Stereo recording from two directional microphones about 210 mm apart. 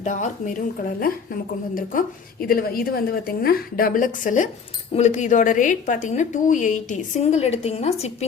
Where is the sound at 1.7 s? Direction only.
40° left (ahead or behind).